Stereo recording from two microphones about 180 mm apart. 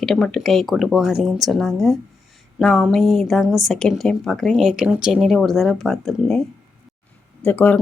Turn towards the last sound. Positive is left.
turn(degrees=10)  # may be behind; listen again after turning